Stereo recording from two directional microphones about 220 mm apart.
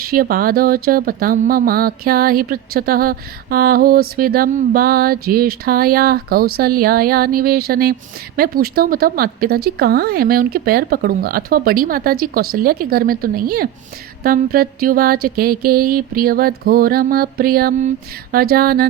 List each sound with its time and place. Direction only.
0.0 s speech: 40° right (ahead or behind)